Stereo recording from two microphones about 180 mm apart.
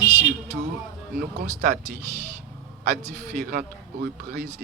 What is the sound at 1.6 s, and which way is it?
Speech, 60° right (ahead or behind).